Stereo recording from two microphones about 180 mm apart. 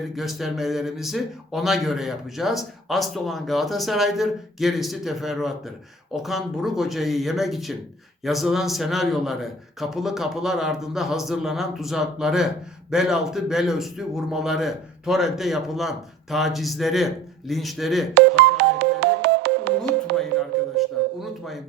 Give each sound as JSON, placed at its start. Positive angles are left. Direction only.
{"t": 0.2, "sound": "speech", "side_deg": 0}
{"t": 18.1, "sound": "music", "side_deg": -70}
{"t": 20.7, "sound": "music", "side_deg": 0}